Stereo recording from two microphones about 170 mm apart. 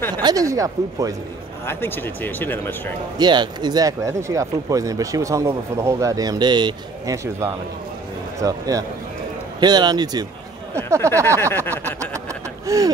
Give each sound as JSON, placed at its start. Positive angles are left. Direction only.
{"t": 0.2, "sound": "speech", "side_deg": -20}
{"t": 1.7, "sound": "speech", "side_deg": 10}
{"t": 3.2, "sound": "speech", "side_deg": -25}
{"t": 11.2, "sound": "speech", "side_deg": 10}
{"t": 12.6, "sound": "a sound", "side_deg": -20}